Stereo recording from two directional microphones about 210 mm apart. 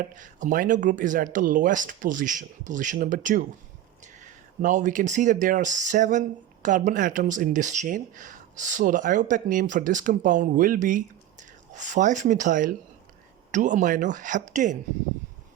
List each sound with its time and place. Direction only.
0.0 s speech: 40° right (ahead or behind)